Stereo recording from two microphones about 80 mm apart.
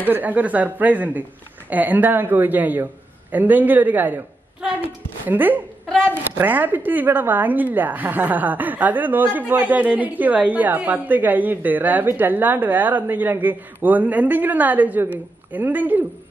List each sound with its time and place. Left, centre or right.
0.0 s a woman's voice: right
5.2 s a woman's voice: right